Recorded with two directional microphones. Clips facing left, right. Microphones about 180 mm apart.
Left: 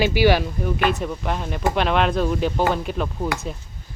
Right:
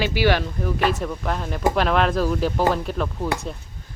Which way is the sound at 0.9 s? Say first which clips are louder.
Left 1 dB; centre (ahead or behind).